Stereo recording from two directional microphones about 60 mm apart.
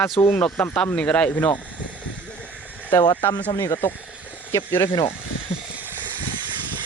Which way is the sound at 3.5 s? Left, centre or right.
Left.